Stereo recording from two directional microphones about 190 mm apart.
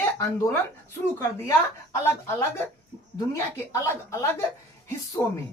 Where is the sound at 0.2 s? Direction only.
15° left (ahead or behind).